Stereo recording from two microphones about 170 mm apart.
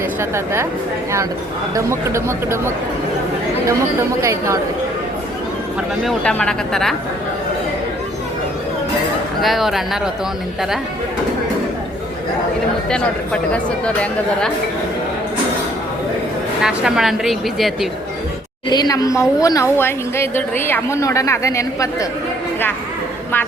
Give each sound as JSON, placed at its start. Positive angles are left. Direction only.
{"t": 0.2, "sound": "speech", "side_deg": -15}
{"t": 1.7, "sound": "speech", "side_deg": -15}
{"t": 4.2, "sound": "speech", "side_deg": -15}
{"t": 6.0, "sound": "speech", "side_deg": 0}
{"t": 9.4, "sound": "speech", "side_deg": 0}
{"t": 12.9, "sound": "speech", "side_deg": 5}
{"t": 16.6, "sound": "speech", "side_deg": -5}
{"t": 18.7, "sound": "a woman's voice", "side_deg": 25}